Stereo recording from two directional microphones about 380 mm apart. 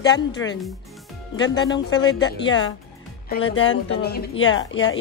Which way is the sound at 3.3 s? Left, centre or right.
Left.